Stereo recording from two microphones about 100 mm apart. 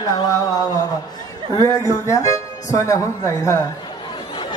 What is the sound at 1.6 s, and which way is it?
Speech, 30° left (ahead or behind).